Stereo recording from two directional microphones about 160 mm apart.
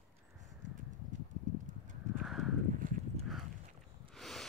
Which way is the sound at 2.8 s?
60° right (ahead or behind).